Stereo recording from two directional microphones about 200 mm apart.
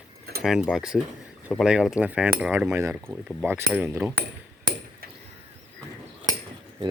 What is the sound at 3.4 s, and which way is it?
Speech, 10° right (ahead or behind).